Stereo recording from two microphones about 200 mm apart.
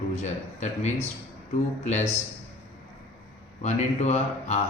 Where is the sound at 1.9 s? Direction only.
35° left (ahead or behind).